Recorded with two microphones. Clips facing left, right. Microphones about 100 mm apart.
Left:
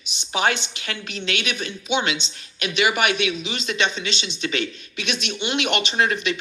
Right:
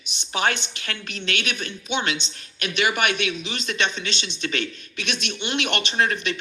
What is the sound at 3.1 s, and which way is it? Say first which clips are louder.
Speech: left 2 dB; 50° right (ahead or behind).